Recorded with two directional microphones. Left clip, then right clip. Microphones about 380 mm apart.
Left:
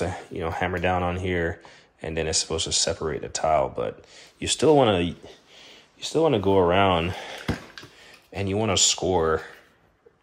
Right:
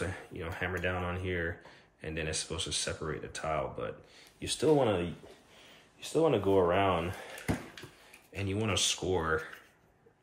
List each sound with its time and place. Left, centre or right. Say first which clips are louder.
0.0 s speech: left 10 dB; centre
8.3 s speech: left 9 dB; centre